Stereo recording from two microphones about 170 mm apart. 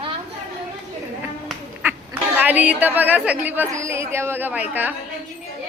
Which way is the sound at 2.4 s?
10° right (ahead or behind).